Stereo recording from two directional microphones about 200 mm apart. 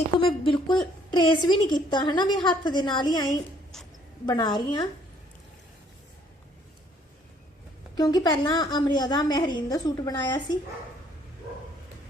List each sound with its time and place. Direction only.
0.2 s a woman's voice: 25° left (ahead or behind)
4.3 s a woman's voice: 20° left (ahead or behind)
7.9 s a woman's voice: 20° left (ahead or behind)